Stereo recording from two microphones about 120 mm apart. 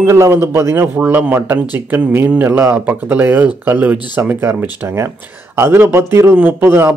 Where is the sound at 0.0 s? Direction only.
25° right (ahead or behind).